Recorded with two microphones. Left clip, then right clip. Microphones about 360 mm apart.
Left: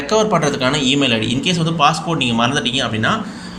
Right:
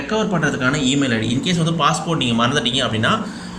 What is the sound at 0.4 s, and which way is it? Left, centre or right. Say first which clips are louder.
A man's voice: left 2 dB; centre.